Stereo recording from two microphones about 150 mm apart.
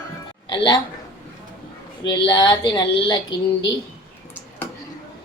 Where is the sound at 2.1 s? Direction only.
30° left (ahead or behind).